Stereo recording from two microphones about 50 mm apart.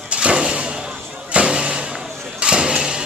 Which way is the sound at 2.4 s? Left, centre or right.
Centre.